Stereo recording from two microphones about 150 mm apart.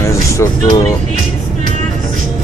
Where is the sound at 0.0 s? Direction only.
20° left (ahead or behind).